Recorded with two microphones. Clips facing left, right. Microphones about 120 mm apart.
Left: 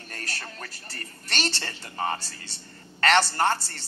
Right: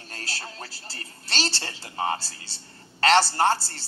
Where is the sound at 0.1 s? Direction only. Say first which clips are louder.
Even; 35° right (ahead or behind).